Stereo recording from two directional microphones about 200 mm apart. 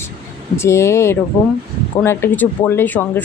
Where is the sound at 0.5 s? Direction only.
15° left (ahead or behind).